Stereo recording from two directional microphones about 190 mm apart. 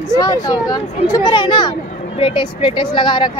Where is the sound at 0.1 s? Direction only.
20° left (ahead or behind).